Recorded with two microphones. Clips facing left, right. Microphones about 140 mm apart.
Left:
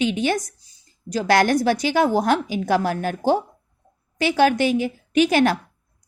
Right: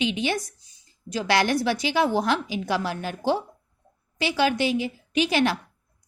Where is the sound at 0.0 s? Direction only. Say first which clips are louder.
Left 4 dB; 45° left (ahead or behind).